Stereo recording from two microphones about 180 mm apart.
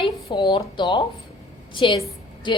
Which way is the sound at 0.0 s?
25° left (ahead or behind).